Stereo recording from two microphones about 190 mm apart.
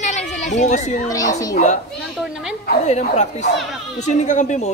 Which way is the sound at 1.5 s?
40° left (ahead or behind).